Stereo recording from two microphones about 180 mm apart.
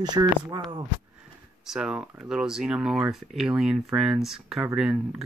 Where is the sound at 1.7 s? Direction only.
5° right (ahead or behind).